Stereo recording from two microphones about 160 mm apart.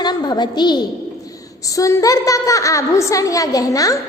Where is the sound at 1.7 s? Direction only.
20° left (ahead or behind).